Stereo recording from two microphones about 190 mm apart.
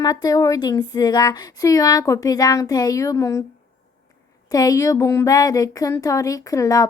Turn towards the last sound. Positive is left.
turn(degrees=20)  # may be behind; listen again after turning